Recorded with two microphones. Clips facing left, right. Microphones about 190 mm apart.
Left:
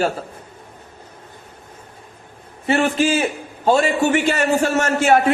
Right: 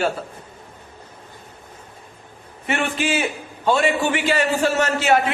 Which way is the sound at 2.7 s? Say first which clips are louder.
Left 5 dB; 35° left (ahead or behind).